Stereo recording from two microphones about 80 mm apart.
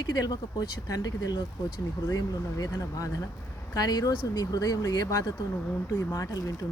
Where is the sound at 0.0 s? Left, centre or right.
Left.